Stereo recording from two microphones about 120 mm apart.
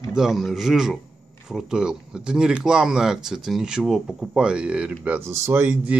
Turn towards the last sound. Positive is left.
turn(degrees=-15)  # may be behind; listen again after turning